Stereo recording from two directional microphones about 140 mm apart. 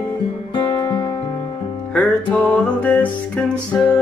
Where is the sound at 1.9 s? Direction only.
10° left (ahead or behind).